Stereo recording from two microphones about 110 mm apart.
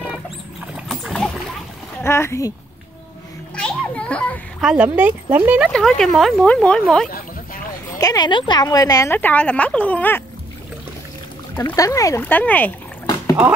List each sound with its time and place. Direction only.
0.7 s pig: centre (ahead or behind)
2.0 s speech: 25° left (ahead or behind)
3.5 s children playing: 10° left (ahead or behind)
4.6 s speech: 10° right (ahead or behind)
5.7 s speech: 5° left (ahead or behind)
8.0 s speech: 35° left (ahead or behind)
9.1 s speech: 15° left (ahead or behind)
11.7 s speech: 30° left (ahead or behind)
12.2 s speech: 15° left (ahead or behind)